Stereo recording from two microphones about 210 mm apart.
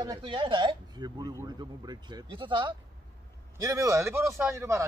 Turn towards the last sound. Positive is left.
turn(degrees=-15)  # may be behind; listen again after turning